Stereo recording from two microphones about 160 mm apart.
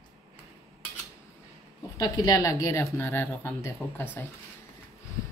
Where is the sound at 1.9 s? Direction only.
25° left (ahead or behind).